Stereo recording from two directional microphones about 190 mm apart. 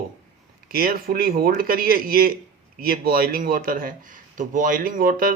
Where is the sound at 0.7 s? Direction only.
50° right (ahead or behind).